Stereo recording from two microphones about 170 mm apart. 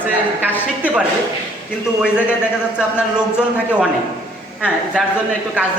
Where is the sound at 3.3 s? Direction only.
5° right (ahead or behind).